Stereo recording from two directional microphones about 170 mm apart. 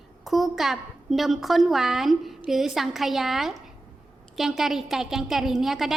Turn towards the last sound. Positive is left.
turn(degrees=0)  # may be behind; listen again after turning